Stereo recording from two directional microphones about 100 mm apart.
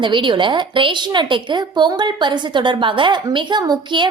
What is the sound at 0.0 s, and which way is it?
A woman's voice, 55° right (ahead or behind).